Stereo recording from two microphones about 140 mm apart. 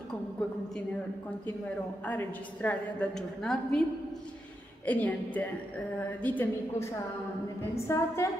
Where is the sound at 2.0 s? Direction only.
10° left (ahead or behind).